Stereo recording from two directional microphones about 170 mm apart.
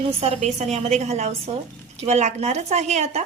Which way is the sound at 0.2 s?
40° right (ahead or behind).